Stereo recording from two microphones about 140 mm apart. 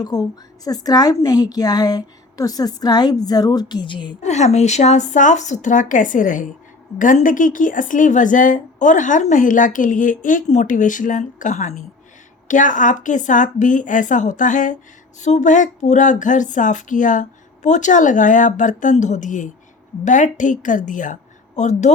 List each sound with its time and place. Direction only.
0.0 s a woman's voice: 25° left (ahead or behind)
4.2 s a woman's voice: 55° left (ahead or behind)